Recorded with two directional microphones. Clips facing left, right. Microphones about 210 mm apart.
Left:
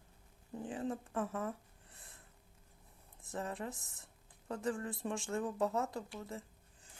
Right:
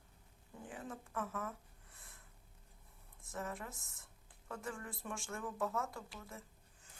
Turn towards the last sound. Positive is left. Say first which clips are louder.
# left 7 dB
turn(degrees=30)  # may be behind; listen again after turning